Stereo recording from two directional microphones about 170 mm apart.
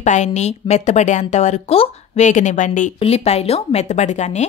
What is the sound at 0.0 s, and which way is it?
Speech, 45° left (ahead or behind).